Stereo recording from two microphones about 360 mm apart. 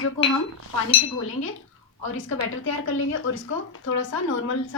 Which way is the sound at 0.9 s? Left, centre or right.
Left.